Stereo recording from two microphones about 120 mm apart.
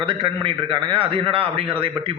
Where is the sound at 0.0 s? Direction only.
45° right (ahead or behind).